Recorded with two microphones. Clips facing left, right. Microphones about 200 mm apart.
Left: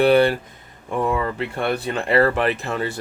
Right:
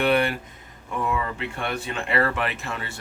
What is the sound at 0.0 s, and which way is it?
Speech, 35° left (ahead or behind).